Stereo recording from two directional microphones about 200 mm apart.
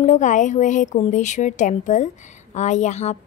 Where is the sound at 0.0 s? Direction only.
35° left (ahead or behind).